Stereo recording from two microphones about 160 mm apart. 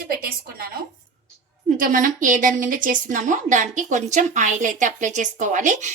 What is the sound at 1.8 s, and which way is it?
A woman's voice, 55° right (ahead or behind).